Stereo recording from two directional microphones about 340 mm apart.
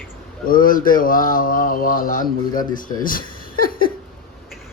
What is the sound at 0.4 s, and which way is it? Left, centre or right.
Speech, left.